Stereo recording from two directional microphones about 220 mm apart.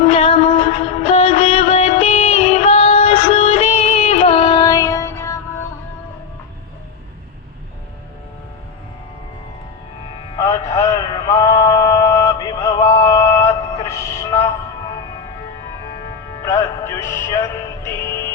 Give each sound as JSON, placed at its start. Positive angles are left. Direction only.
{"t": 0.0, "sound": "music", "side_deg": 25}
{"t": 10.3, "sound": "a sound", "side_deg": 15}
{"t": 16.4, "sound": "music", "side_deg": 15}